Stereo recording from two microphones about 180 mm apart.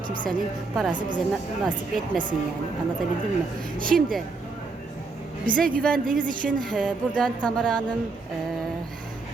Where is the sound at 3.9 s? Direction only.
Centre (ahead or behind).